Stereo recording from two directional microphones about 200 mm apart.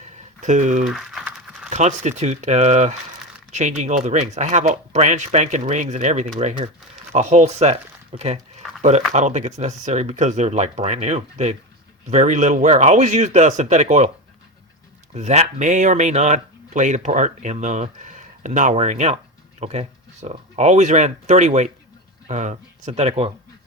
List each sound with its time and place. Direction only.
0.0 s a sound: 40° right (ahead or behind)
0.9 s crumpling: centre (ahead or behind)
1.7 s speech: 35° right (ahead or behind)
15.1 s speech: 35° right (ahead or behind)